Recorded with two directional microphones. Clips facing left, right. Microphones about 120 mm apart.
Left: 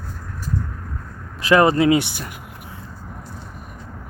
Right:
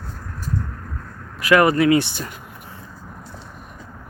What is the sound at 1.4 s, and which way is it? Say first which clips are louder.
Speech: even; 25° left (ahead or behind).